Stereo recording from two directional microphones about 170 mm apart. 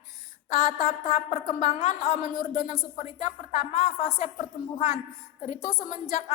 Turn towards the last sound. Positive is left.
turn(degrees=45)  # may be behind; listen again after turning